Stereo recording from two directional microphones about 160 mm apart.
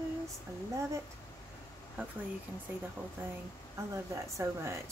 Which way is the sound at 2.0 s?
10° right (ahead or behind).